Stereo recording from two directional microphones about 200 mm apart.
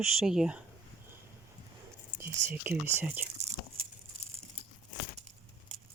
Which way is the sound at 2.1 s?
10° right (ahead or behind).